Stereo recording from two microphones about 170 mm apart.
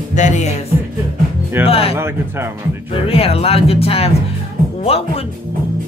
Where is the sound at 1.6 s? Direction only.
35° left (ahead or behind).